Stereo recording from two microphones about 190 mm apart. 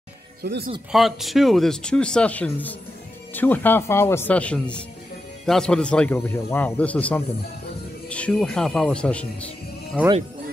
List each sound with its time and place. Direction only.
0.4 s speech: 55° right (ahead or behind)
0.9 s a man's voice: centre (ahead or behind)